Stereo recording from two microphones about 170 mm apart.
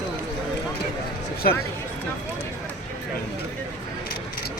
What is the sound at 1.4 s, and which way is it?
Speech, 60° left (ahead or behind).